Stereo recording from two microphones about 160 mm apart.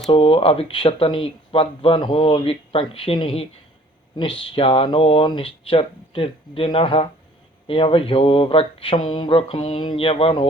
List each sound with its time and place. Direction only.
0.1 s speech: 35° left (ahead or behind)